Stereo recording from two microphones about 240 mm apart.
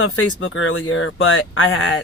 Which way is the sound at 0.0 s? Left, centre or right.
Left.